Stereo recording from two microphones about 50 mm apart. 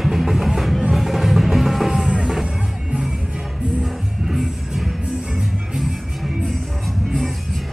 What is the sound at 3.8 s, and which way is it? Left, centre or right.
Music, centre.